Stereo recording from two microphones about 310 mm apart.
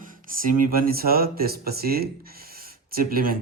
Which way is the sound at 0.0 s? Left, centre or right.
Right.